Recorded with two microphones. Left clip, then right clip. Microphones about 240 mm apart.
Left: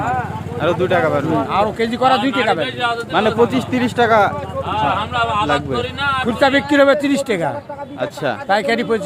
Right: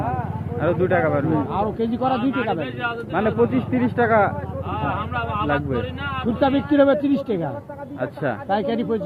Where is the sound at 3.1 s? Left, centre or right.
Left.